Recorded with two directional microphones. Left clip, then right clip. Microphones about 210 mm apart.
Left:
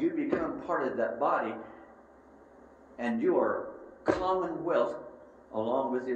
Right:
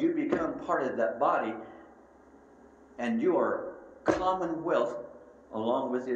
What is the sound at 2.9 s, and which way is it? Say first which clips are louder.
Speech: even; 35° right (ahead or behind).